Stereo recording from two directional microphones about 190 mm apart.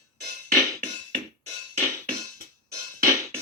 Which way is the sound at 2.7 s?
15° right (ahead or behind).